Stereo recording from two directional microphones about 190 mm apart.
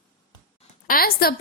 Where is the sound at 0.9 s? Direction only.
50° left (ahead or behind).